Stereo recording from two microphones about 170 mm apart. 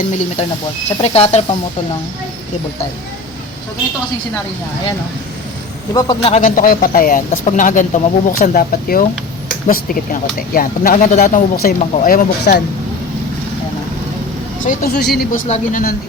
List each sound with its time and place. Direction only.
0.9 s speech: 40° left (ahead or behind)
5.9 s a man's voice: 25° left (ahead or behind)
6.2 s speech: 40° left (ahead or behind)
6.6 s speech: 55° left (ahead or behind)
14.6 s speech: 50° left (ahead or behind)
14.9 s speech: 70° left (ahead or behind)
15.4 s speech: 40° left (ahead or behind)